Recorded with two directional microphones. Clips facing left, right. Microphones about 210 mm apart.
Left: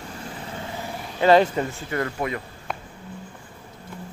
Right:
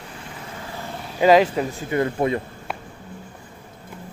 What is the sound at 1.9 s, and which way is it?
Speech, 20° right (ahead or behind).